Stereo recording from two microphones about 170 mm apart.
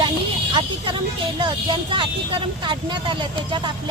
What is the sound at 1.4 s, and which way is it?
Speech, 30° right (ahead or behind).